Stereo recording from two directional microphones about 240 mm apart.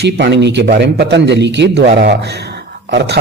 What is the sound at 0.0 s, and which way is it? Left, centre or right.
A man's voice, right.